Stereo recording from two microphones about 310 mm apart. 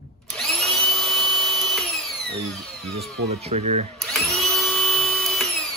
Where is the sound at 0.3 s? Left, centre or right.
Centre.